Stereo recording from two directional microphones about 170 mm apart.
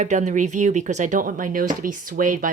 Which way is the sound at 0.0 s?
45° right (ahead or behind).